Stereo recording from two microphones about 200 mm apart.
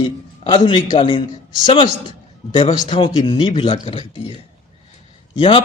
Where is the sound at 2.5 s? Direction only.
25° left (ahead or behind).